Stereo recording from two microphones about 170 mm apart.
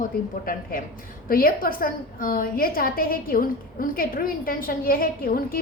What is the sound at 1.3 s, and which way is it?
A woman's voice, 60° left (ahead or behind).